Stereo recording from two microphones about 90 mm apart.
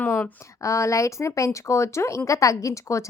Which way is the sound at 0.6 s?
35° left (ahead or behind).